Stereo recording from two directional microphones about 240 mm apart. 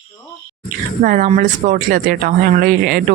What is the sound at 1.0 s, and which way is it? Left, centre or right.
Speech, right.